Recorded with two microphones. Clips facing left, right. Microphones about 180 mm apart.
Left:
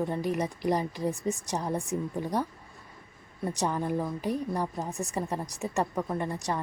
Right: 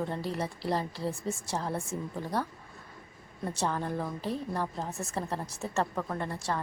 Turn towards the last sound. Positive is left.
turn(degrees=20)  # may be behind; listen again after turning